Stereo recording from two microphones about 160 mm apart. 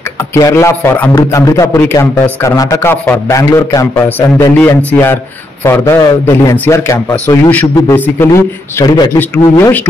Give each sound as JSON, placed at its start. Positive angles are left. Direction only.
{"t": 0.3, "sound": "a man's voice", "side_deg": 20}